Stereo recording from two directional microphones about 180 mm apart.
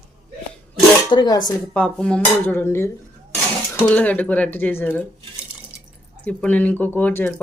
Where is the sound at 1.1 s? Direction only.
25° left (ahead or behind).